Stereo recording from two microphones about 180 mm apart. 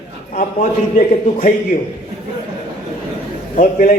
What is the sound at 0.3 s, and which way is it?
A man's voice, 45° left (ahead or behind).